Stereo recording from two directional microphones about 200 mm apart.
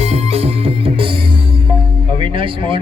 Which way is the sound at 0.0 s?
35° right (ahead or behind).